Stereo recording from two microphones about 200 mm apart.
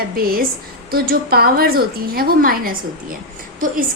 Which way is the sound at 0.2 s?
50° right (ahead or behind).